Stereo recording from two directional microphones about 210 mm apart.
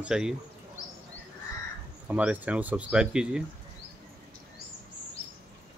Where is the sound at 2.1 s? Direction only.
5° right (ahead or behind).